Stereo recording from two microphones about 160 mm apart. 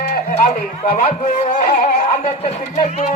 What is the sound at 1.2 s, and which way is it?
Speech, 50° left (ahead or behind).